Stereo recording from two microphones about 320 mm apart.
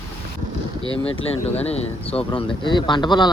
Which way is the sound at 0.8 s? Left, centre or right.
Centre.